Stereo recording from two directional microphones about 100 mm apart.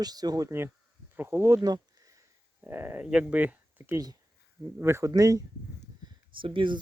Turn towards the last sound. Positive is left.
turn(degrees=-55)  # may be behind; listen again after turning